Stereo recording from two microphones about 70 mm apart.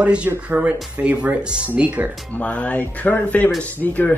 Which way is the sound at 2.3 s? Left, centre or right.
Centre.